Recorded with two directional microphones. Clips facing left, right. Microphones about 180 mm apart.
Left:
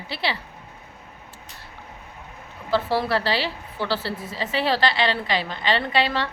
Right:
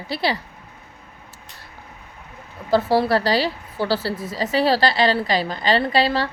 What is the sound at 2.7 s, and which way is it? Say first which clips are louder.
A woman's voice: right 5 dB; 40° right (ahead or behind).